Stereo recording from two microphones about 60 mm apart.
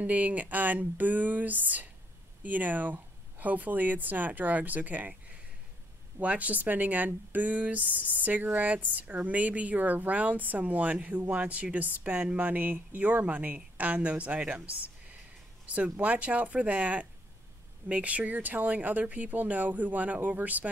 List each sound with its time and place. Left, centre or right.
0.0 s speech: right